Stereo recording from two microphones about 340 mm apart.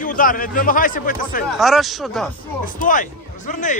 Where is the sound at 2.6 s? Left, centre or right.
Left.